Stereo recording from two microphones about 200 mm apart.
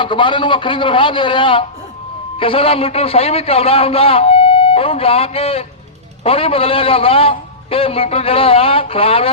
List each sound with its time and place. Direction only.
0.0 s a man's voice: 25° left (ahead or behind)